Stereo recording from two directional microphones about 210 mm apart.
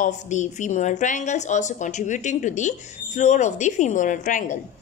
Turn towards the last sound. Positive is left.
turn(degrees=35)  # may be behind; listen again after turning